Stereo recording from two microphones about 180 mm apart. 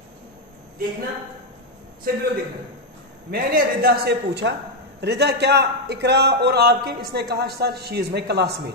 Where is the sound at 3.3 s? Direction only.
55° right (ahead or behind).